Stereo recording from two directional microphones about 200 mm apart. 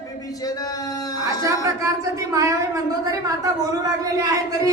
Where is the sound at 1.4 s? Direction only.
15° right (ahead or behind).